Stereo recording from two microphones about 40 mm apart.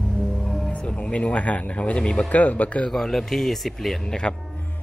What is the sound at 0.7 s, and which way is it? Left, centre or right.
Music, left.